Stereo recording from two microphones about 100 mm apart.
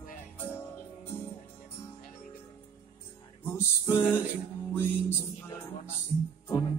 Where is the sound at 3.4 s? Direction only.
25° left (ahead or behind).